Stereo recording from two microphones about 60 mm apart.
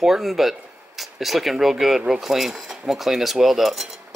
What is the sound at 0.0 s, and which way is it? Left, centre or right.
Cutlery, centre.